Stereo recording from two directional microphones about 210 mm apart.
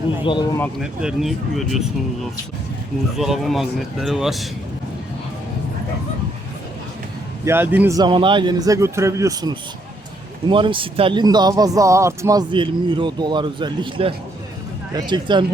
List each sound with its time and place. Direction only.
0.3 s speech: 20° left (ahead or behind)
0.8 s speech: centre (ahead or behind)
3.2 s speech: centre (ahead or behind)
7.4 s a man's voice: 10° right (ahead or behind)